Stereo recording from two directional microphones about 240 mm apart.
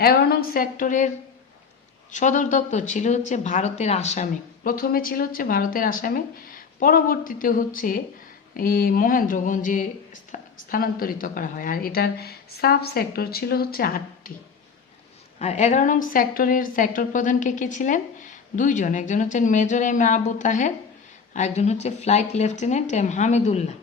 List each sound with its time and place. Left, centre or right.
0.0 s a woman's voice: left
15.4 s a woman's voice: left